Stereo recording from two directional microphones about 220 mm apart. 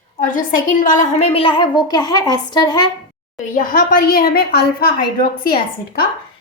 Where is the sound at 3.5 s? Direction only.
40° left (ahead or behind).